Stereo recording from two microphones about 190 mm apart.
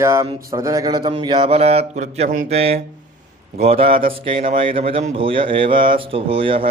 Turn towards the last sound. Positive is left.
turn(degrees=-30)  # may be behind; listen again after turning